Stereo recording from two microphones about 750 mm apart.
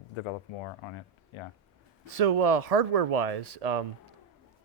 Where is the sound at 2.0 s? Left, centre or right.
Right.